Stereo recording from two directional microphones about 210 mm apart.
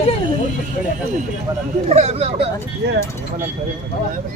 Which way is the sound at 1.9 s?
30° right (ahead or behind).